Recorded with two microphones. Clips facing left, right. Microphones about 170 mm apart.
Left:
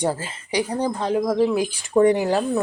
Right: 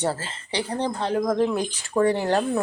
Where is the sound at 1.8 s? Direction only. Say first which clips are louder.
Left 5 dB; 20° left (ahead or behind).